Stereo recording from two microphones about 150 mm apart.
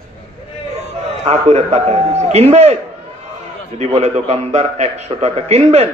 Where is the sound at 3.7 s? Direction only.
45° right (ahead or behind).